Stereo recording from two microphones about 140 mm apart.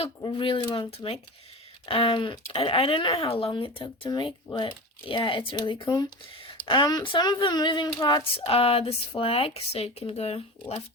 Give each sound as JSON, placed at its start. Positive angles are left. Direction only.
{"t": 0.2, "sound": "speech", "side_deg": 35}